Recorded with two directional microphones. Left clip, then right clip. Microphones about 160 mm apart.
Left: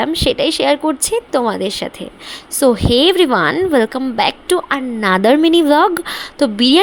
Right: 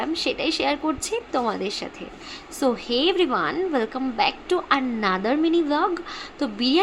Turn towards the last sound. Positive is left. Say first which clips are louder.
# left 10 dB
turn(degrees=50)  # may be behind; listen again after turning